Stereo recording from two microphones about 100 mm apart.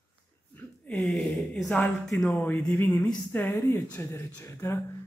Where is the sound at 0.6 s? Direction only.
15° left (ahead or behind).